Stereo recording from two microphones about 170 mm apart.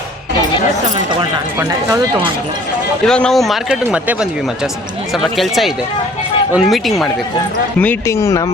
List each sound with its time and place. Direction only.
1.5 s speech: 15° right (ahead or behind)
3.1 s speech: 5° left (ahead or behind)
7.8 s speech: 10° left (ahead or behind)